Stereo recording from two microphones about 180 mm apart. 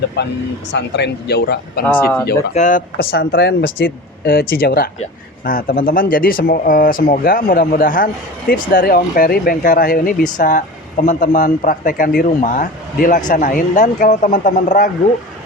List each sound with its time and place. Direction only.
0.2 s speech: 75° left (ahead or behind)
2.5 s speech: 45° left (ahead or behind)